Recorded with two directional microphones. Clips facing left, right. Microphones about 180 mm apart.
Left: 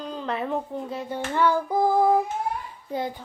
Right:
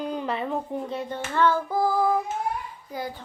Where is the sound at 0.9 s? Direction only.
Centre (ahead or behind).